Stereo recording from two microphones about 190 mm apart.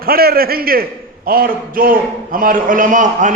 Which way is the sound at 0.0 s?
50° right (ahead or behind).